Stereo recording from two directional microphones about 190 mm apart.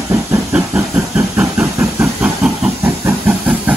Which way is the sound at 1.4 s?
10° right (ahead or behind).